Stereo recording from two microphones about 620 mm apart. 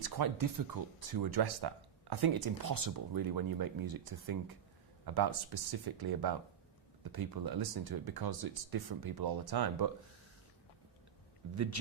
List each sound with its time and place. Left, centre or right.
0.0 s speech: right